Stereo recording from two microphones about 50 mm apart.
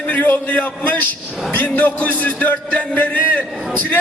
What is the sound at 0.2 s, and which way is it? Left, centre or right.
A man's voice, left.